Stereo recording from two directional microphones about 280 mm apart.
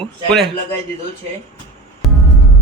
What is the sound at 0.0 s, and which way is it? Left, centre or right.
Speech, centre.